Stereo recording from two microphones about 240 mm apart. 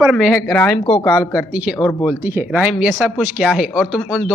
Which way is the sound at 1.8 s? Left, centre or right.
Centre.